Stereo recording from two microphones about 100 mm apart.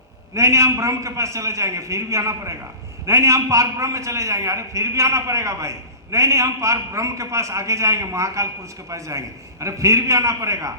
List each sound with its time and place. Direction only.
0.3 s a man's voice: 30° right (ahead or behind)